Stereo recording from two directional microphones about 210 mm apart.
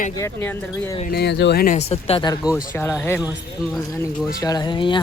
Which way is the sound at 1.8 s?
30° left (ahead or behind).